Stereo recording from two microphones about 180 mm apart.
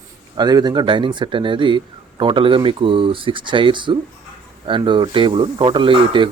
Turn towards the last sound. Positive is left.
turn(degrees=-30)  # may be behind; listen again after turning